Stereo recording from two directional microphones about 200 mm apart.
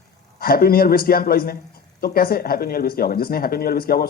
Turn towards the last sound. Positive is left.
turn(degrees=50)  # may be behind; listen again after turning